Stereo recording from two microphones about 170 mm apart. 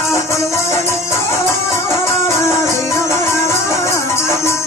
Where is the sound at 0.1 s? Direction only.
15° left (ahead or behind).